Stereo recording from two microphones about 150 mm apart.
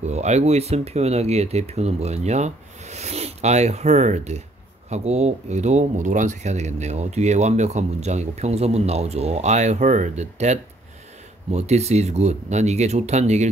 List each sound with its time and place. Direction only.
0.0 s speech: 50° right (ahead or behind)